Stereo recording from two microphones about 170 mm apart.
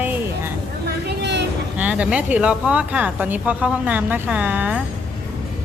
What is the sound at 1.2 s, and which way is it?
Vehicle, 90° right.